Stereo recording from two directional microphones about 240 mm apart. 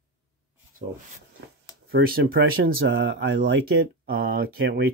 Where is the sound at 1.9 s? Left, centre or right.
Right.